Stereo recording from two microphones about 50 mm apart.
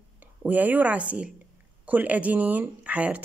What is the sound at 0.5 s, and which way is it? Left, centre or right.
A woman's voice, right.